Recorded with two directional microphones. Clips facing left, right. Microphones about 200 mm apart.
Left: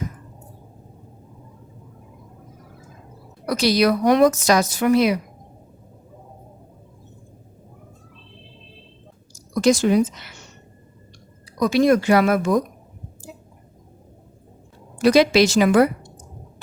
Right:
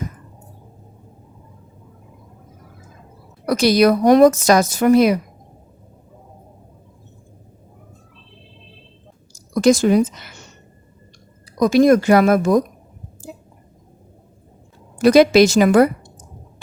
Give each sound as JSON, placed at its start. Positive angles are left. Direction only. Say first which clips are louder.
{"t": 3.4, "sound": "a woman's voice", "louder": "right 4 dB", "side_deg": -50}
{"t": 9.6, "sound": "a woman's voice", "louder": "right 3 dB", "side_deg": -50}
{"t": 11.6, "sound": "a woman's voice", "louder": "right 4 dB", "side_deg": -45}
{"t": 15.0, "sound": "a woman's voice", "louder": "right 4 dB", "side_deg": -50}